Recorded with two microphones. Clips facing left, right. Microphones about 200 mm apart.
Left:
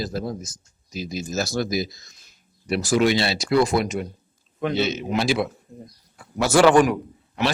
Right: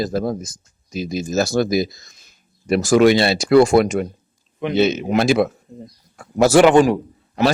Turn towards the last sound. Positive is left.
turn(degrees=-35)  # may be behind; listen again after turning